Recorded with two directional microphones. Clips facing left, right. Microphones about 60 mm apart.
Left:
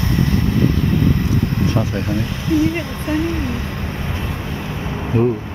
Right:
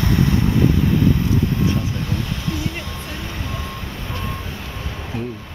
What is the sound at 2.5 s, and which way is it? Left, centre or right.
Speech, left.